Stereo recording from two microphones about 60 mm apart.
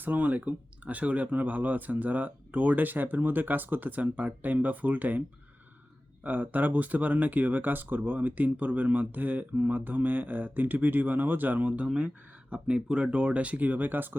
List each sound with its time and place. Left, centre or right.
0.0 s speech: right
6.2 s speech: right